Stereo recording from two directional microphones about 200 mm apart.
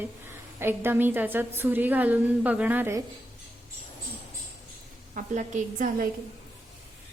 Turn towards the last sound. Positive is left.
turn(degrees=-40)  # may be behind; listen again after turning